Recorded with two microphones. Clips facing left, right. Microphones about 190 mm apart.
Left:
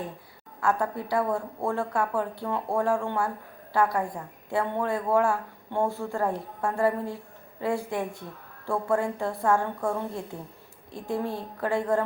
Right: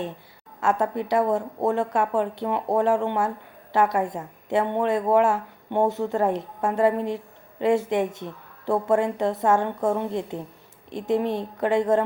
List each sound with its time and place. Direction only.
0.6 s a woman's voice: 25° right (ahead or behind)